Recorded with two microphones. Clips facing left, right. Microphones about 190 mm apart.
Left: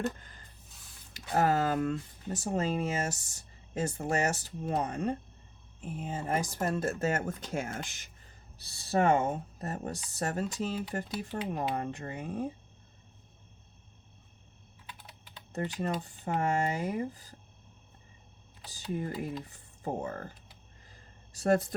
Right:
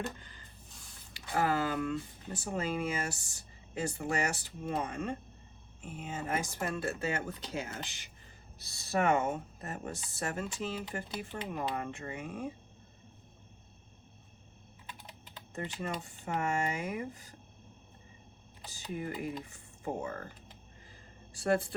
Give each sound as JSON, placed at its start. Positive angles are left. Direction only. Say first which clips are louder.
{"t": 0.2, "sound": "a sound", "louder": "right 1 dB", "side_deg": 45}
{"t": 1.1, "sound": "speech", "louder": "left 3 dB", "side_deg": 40}
{"t": 8.6, "sound": "speech", "louder": "left 3 dB", "side_deg": 35}
{"t": 15.5, "sound": "speech", "louder": "left 5 dB", "side_deg": 40}
{"t": 18.7, "sound": "speech", "louder": "left 3 dB", "side_deg": 40}
{"t": 21.3, "sound": "speech", "louder": "left 3 dB", "side_deg": 40}